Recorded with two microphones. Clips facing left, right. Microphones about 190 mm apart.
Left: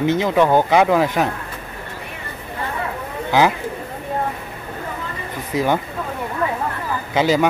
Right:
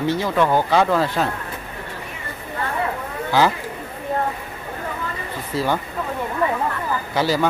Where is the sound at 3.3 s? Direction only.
20° left (ahead or behind).